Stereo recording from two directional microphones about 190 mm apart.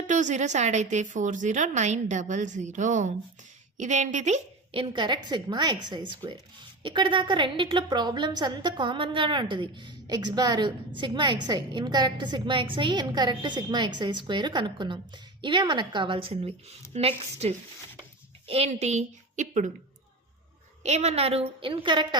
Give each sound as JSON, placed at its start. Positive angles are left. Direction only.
{"t": 0.1, "sound": "a woman's voice", "side_deg": -40}
{"t": 20.8, "sound": "a woman's voice", "side_deg": -35}